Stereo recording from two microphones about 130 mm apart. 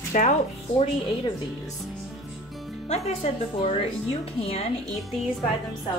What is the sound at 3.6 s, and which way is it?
Speech, 50° left (ahead or behind).